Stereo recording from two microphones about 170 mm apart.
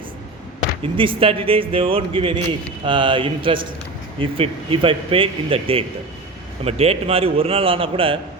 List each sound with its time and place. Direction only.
0.8 s speech: 30° right (ahead or behind)